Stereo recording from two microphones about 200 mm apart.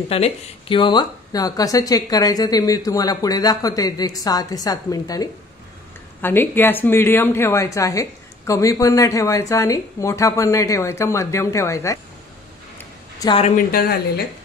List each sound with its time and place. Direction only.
0.1 s a woman's voice: 25° left (ahead or behind)
13.3 s a woman's voice: 30° left (ahead or behind)
13.6 s speech: 45° left (ahead or behind)